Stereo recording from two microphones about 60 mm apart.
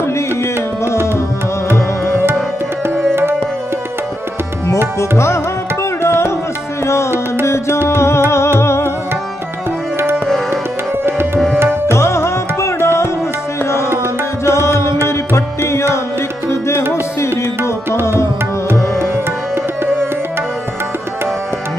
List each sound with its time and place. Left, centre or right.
0.0 s music: left
3.0 s music: right
5.1 s tabla: left
6.8 s music: left
11.3 s tabla: centre
11.9 s music: left
14.4 s music: left
16.4 s tabla: left
18.0 s music: left
18.9 s tabla: right